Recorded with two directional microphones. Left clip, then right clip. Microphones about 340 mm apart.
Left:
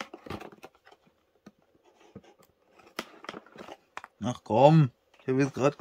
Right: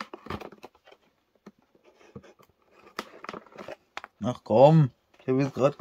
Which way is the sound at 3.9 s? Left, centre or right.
Centre.